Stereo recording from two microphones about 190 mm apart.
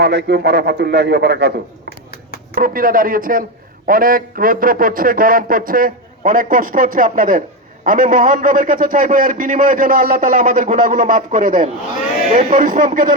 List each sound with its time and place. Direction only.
0.0 s a man's voice: 60° right (ahead or behind)
2.6 s a man's voice: 45° right (ahead or behind)